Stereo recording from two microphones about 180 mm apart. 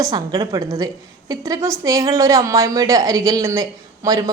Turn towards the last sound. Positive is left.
turn(degrees=-20)  # may be behind; listen again after turning